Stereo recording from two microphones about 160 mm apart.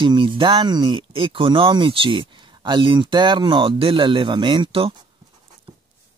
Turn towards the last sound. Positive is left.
turn(degrees=-30)  # may be behind; listen again after turning